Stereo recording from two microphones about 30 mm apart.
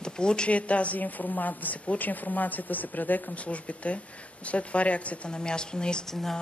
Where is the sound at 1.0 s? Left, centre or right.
Left.